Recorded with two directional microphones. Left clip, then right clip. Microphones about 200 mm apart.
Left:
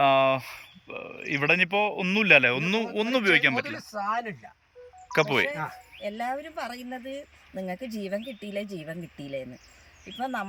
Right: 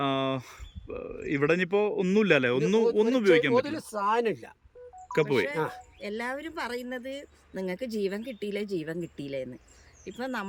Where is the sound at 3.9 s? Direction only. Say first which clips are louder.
Right 5 dB; 35° right (ahead or behind).